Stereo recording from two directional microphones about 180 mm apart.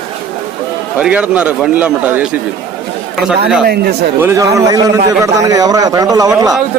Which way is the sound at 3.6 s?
60° right (ahead or behind).